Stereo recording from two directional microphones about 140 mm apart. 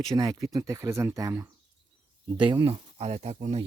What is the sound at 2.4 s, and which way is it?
Speech, 35° right (ahead or behind).